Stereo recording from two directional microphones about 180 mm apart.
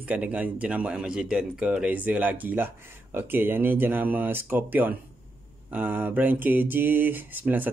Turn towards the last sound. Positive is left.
turn(degrees=-10)  # may be behind; listen again after turning